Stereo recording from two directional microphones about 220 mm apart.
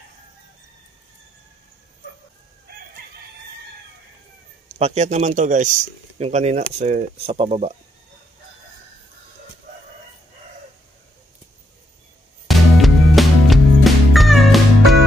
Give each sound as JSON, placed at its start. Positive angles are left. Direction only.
{"t": 4.7, "sound": "a man's voice", "side_deg": -30}
{"t": 12.4, "sound": "music", "side_deg": 0}